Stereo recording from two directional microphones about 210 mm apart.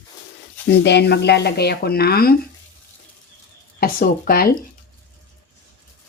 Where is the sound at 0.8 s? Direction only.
55° left (ahead or behind).